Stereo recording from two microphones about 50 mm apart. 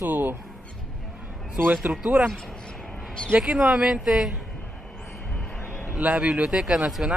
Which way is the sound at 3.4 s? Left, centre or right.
Centre.